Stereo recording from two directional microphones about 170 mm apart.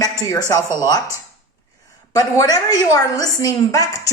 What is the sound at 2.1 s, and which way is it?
Speech, 20° left (ahead or behind).